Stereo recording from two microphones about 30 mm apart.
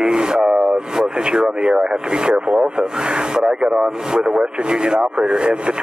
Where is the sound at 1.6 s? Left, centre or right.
Right.